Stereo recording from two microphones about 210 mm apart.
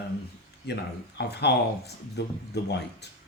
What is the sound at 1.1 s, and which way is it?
Speech, 50° left (ahead or behind).